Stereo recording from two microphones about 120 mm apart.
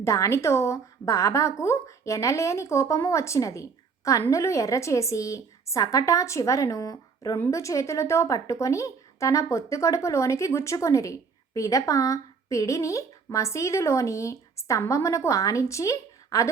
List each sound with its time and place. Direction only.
0.0 s a woman's voice: 25° left (ahead or behind)